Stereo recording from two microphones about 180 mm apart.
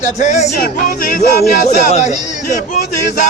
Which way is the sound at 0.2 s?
40° left (ahead or behind).